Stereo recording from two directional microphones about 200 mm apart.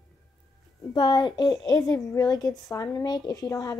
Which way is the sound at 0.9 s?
20° left (ahead or behind).